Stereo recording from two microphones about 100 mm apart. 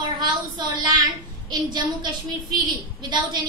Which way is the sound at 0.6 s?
40° right (ahead or behind).